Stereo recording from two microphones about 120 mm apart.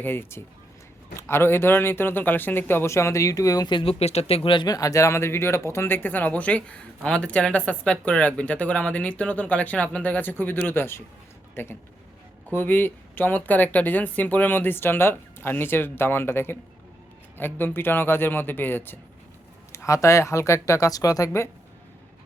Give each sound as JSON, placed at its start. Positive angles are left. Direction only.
{"t": 0.0, "sound": "a man's voice", "side_deg": 20}
{"t": 4.0, "sound": "speech", "side_deg": 60}
{"t": 4.7, "sound": "a man's voice", "side_deg": 30}